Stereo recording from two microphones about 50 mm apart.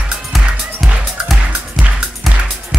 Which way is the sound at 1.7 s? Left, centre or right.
Right.